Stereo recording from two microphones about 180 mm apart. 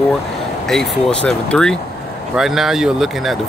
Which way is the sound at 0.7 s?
5° left (ahead or behind).